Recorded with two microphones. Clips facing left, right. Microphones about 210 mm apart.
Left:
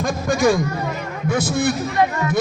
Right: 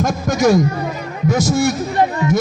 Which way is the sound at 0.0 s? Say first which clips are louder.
Right 2 dB; 40° right (ahead or behind).